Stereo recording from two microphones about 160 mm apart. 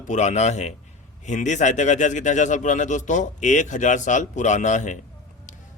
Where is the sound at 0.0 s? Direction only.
50° left (ahead or behind).